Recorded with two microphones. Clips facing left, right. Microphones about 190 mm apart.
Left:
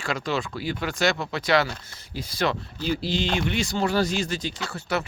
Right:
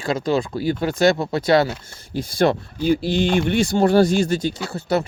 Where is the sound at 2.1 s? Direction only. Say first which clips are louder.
Right 8 dB; 50° right (ahead or behind).